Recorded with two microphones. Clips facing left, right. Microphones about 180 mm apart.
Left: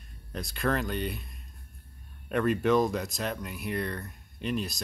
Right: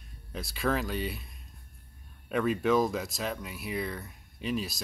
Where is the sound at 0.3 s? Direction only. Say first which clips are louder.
Left 1 dB; centre (ahead or behind).